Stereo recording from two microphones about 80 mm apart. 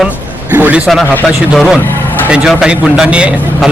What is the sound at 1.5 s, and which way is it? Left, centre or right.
A man's voice, centre.